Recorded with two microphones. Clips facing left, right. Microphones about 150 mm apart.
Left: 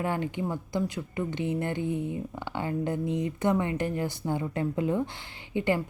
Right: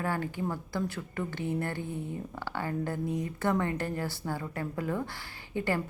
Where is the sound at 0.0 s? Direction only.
20° left (ahead or behind).